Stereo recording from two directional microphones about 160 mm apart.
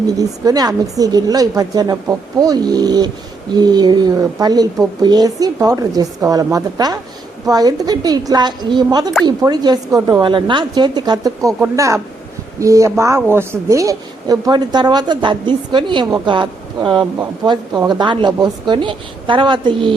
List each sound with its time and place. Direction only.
0.2 s speech: 20° right (ahead or behind)
12.5 s speech: 20° right (ahead or behind)